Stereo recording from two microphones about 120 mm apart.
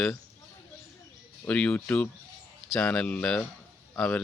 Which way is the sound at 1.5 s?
10° left (ahead or behind).